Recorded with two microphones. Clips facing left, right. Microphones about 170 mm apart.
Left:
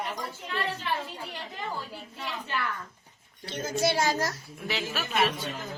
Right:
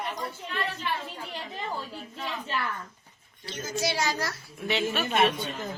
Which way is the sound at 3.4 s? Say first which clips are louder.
Left 3 dB; 55° left (ahead or behind).